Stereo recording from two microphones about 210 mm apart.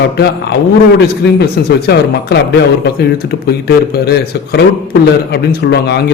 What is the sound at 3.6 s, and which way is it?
A man's voice, 50° left (ahead or behind).